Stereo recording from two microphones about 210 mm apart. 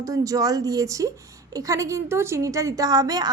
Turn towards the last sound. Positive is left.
turn(degrees=-15)  # may be behind; listen again after turning